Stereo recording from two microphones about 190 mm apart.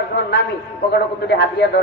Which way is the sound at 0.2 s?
60° left (ahead or behind).